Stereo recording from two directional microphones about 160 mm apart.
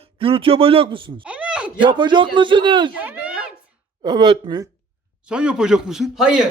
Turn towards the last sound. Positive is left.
turn(degrees=-5)  # may be behind; listen again after turning